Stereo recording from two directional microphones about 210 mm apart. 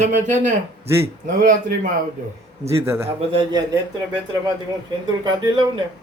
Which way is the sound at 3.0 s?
25° right (ahead or behind).